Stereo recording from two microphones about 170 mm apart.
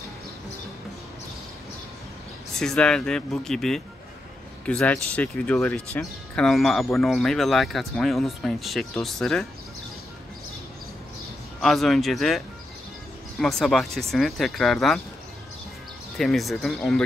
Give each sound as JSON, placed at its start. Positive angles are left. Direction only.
{"t": 2.5, "sound": "speech", "side_deg": 5}
{"t": 11.6, "sound": "speech", "side_deg": 0}
{"t": 16.2, "sound": "speech", "side_deg": 0}